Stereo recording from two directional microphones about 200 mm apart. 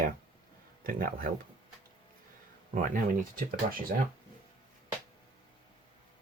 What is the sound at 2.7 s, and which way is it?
Speech, 45° right (ahead or behind).